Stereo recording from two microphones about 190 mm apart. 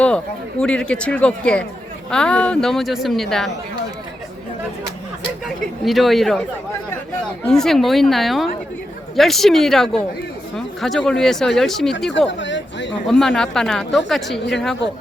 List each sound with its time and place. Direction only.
0.6 s speech: 5° left (ahead or behind)
5.5 s speech: centre (ahead or behind)
7.4 s speech: centre (ahead or behind)
12.4 s speech: 70° left (ahead or behind)
13.1 s speech: centre (ahead or behind)